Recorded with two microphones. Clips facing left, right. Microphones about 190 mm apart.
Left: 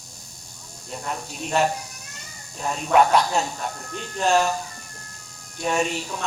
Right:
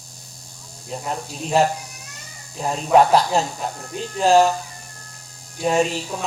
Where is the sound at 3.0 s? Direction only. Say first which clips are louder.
Right 3 dB; 35° right (ahead or behind).